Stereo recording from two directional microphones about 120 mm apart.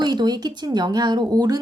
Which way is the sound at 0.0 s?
40° right (ahead or behind).